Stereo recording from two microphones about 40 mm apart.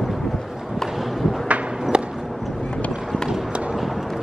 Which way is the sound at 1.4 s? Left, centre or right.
Right.